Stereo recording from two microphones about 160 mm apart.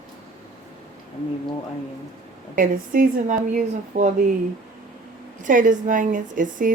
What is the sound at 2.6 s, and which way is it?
A woman's voice, 60° right (ahead or behind).